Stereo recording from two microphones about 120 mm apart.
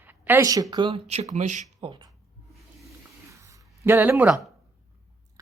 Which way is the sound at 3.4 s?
20° right (ahead or behind).